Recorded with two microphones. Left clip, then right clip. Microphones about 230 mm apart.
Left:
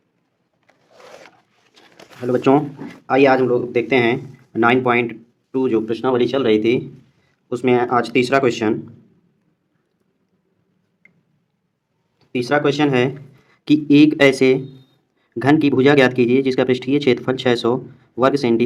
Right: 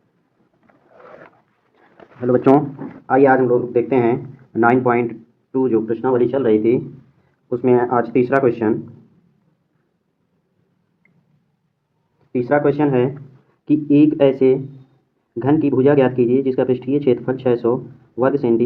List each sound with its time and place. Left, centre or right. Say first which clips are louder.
2.2 s speech: right 2 dB; left
3.1 s speech: right 1 dB; left
3.4 s a man's voice: right 1 dB; left
4.1 s speech: right 1 dB; left
5.9 s speech: right 1 dB; left
7.5 s speech: right 1 dB; left
12.3 s speech: right 1 dB; left
12.7 s a man's voice: even; left
13.7 s speech: left 1 dB; left